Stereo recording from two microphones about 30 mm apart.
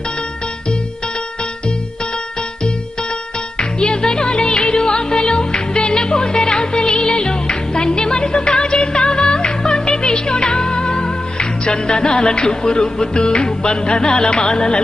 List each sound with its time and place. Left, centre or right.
3.5 s music: left